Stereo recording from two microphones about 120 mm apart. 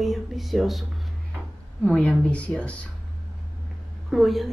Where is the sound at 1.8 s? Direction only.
10° left (ahead or behind).